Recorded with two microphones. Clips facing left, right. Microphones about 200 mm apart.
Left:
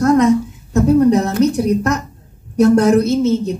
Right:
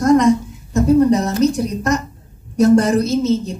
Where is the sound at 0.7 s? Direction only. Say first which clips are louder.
Left 1 dB; 60° left (ahead or behind).